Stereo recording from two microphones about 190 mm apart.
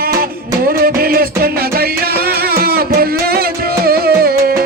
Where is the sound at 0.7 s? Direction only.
50° right (ahead or behind).